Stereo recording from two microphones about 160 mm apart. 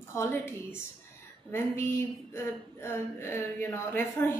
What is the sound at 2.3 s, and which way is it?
Speech, 15° left (ahead or behind).